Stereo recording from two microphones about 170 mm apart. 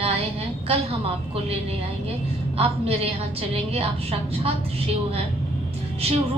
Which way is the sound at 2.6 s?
35° right (ahead or behind).